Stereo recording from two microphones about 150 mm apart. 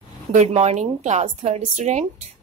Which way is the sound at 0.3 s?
45° right (ahead or behind).